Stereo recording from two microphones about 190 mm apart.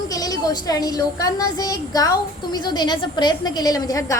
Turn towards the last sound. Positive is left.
turn(degrees=20)  # may be behind; listen again after turning